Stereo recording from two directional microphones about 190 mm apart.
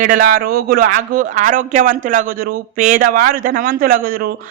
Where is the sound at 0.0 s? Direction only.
45° right (ahead or behind).